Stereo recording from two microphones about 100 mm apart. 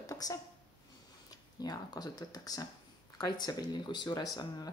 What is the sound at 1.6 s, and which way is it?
Speech, 40° left (ahead or behind).